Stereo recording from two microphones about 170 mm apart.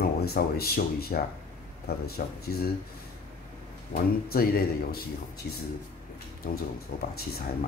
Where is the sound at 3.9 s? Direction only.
60° left (ahead or behind).